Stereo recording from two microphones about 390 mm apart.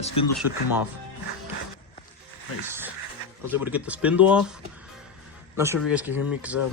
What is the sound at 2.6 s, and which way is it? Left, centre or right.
Speech, centre.